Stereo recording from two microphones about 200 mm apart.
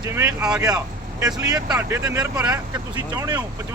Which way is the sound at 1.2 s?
15° right (ahead or behind).